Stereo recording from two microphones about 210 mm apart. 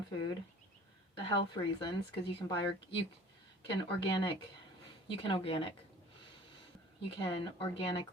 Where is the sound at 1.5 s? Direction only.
20° left (ahead or behind).